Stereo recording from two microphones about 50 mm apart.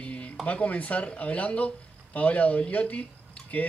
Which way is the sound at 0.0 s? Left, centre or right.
Left.